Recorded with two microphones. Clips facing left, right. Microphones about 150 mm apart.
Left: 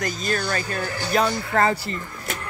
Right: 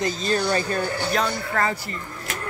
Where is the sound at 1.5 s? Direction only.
25° left (ahead or behind).